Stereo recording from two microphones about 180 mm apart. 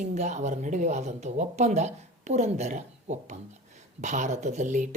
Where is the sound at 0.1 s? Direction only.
40° right (ahead or behind).